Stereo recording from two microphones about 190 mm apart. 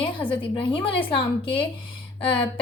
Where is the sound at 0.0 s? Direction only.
25° left (ahead or behind).